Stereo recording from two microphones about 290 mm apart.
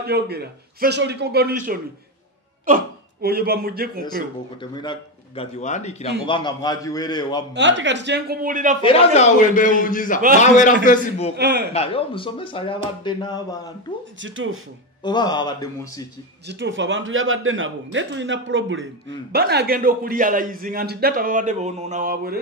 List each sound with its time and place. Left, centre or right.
0.0 s a man's voice: right
4.6 s a man's voice: centre
7.5 s a man's voice: right
8.8 s a man's voice: left
11.3 s a man's voice: right
11.7 s a man's voice: centre
14.2 s a man's voice: right
15.0 s a man's voice: centre
16.4 s a man's voice: right